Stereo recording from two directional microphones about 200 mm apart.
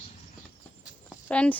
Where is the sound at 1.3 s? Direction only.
5° left (ahead or behind).